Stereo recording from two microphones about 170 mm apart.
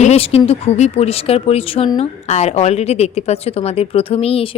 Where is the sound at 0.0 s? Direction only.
35° left (ahead or behind).